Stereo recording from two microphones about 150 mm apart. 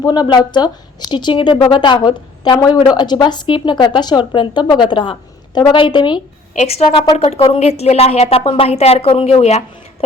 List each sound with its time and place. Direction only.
0.0 s a woman's voice: 30° left (ahead or behind)
6.5 s a woman's voice: 50° left (ahead or behind)
7.0 s speech: 25° left (ahead or behind)
7.3 s a woman's voice: 40° left (ahead or behind)